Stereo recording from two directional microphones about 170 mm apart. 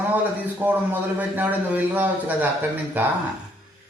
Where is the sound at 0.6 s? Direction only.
10° right (ahead or behind).